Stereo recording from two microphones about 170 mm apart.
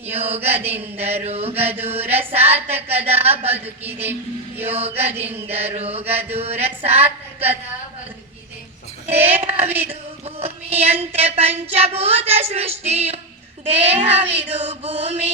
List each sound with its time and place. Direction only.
0.1 s speech: 35° right (ahead or behind)
3.5 s a man's voice: 10° right (ahead or behind)
4.6 s speech: 35° right (ahead or behind)
9.0 s speech: 35° right (ahead or behind)
9.9 s music: 35° right (ahead or behind)
10.8 s speech: 35° right (ahead or behind)